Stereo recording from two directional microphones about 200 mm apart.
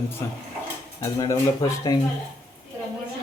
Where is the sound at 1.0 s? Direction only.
15° left (ahead or behind).